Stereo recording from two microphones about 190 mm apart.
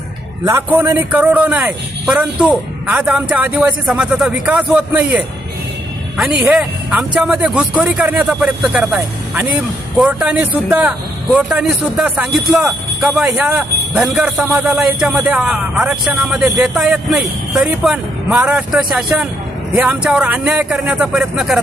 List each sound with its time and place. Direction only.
0.4 s a man's voice: 10° right (ahead or behind)